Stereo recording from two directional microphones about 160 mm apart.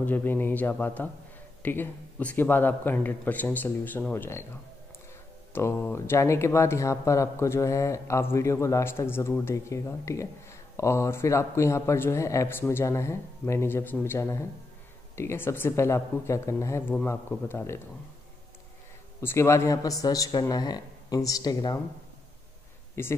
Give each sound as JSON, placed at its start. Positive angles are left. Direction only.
{"t": 0.0, "sound": "speech", "side_deg": 10}
{"t": 19.2, "sound": "speech", "side_deg": 15}
{"t": 23.0, "sound": "speech", "side_deg": 15}